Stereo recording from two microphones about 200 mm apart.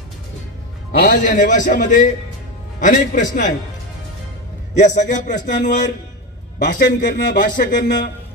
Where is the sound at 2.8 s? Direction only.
40° left (ahead or behind).